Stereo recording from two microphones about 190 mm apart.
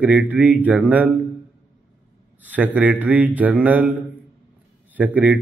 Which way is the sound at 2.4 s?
10° right (ahead or behind).